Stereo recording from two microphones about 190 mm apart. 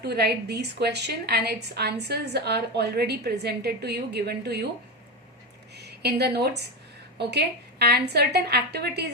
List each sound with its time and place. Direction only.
0.0 s a woman's voice: 60° right (ahead or behind)
5.7 s a woman's voice: 60° right (ahead or behind)